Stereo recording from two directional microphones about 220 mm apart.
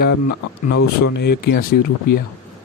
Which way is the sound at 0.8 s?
50° left (ahead or behind).